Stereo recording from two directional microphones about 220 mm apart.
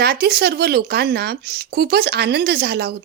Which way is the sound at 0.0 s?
45° right (ahead or behind).